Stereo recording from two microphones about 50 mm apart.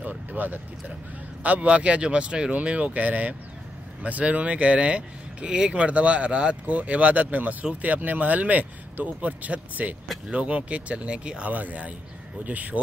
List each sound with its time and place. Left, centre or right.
0.3 s speech: right
11.5 s speech: right